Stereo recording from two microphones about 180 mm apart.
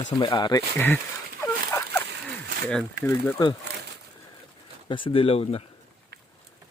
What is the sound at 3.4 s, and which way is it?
Speech, 25° left (ahead or behind).